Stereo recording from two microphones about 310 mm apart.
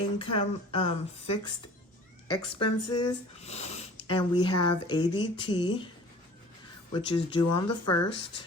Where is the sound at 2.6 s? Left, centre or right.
Left.